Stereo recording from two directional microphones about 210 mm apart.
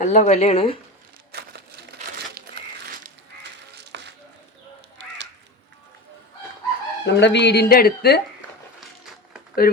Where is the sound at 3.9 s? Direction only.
55° right (ahead or behind).